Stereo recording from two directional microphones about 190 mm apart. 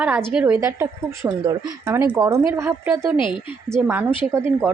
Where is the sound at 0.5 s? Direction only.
15° right (ahead or behind).